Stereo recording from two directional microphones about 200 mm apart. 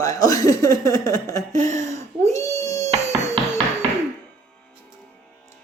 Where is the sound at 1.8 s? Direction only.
15° left (ahead or behind).